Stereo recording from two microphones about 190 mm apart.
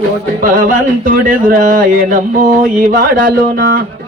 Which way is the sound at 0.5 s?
45° right (ahead or behind).